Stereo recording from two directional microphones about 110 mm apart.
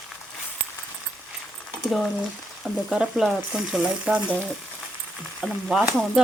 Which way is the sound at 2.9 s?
5° right (ahead or behind).